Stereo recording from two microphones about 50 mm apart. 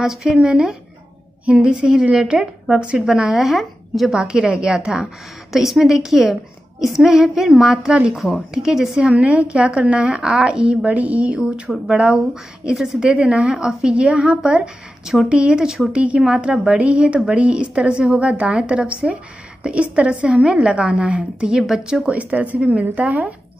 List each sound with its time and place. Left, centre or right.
0.0 s a woman's voice: centre
4.1 s a woman's voice: centre
9.1 s a woman's voice: right
10.9 s a woman's voice: right
12.7 s a woman's voice: centre; by 21.5 s right
21.5 s speech: centre
22.1 s a woman's voice: right